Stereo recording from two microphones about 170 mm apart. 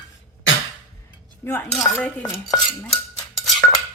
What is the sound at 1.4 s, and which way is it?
Speech, 15° left (ahead or behind).